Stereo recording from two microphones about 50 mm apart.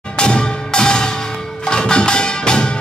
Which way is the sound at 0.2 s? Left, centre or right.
Centre.